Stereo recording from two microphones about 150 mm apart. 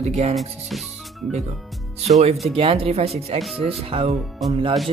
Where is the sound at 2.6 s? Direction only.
40° right (ahead or behind).